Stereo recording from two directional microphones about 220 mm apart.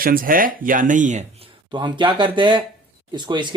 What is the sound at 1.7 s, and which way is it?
Speech, 20° right (ahead or behind).